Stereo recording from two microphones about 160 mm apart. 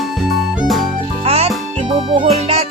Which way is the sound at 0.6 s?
Centre (ahead or behind).